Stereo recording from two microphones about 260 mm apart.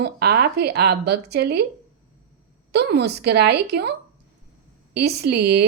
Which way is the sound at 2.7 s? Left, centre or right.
Right.